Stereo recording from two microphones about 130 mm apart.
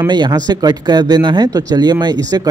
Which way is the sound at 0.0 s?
35° right (ahead or behind).